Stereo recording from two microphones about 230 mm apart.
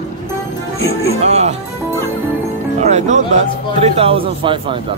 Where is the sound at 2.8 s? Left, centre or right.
Right.